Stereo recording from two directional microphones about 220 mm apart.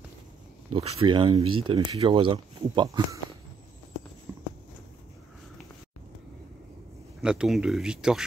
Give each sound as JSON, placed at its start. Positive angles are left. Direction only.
{"t": 0.7, "sound": "speech", "side_deg": -25}
{"t": 4.3, "sound": "clip-clop", "side_deg": -10}
{"t": 7.2, "sound": "speech", "side_deg": -5}